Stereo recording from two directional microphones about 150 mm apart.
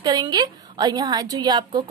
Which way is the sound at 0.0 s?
25° right (ahead or behind).